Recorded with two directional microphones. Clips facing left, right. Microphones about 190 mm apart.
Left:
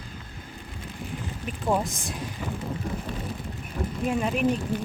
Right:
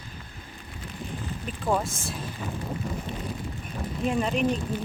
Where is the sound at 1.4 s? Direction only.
15° left (ahead or behind).